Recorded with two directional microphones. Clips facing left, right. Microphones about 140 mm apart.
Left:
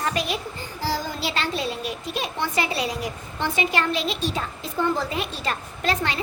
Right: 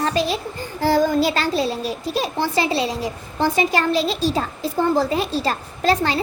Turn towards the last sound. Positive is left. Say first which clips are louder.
# right 6 dB
turn(degrees=-35)  # may be behind; listen again after turning